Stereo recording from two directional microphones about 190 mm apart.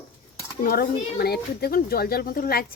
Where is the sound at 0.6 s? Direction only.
55° left (ahead or behind).